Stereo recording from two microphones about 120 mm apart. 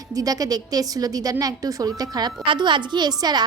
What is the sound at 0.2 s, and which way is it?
A woman's voice, 30° right (ahead or behind).